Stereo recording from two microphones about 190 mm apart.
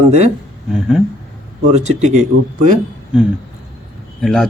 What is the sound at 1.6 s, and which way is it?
Speech, 35° right (ahead or behind).